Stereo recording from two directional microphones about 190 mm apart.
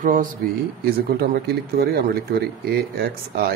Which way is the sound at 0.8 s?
60° right (ahead or behind).